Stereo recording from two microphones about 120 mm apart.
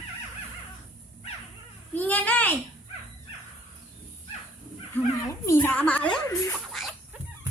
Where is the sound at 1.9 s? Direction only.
15° left (ahead or behind).